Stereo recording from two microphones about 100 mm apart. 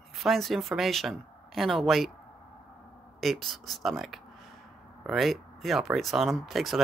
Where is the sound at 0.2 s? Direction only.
Centre (ahead or behind).